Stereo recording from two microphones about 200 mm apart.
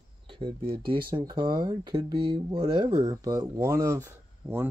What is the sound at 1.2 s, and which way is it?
Speech, 20° right (ahead or behind).